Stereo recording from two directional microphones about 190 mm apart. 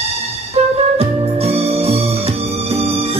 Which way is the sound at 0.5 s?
30° right (ahead or behind).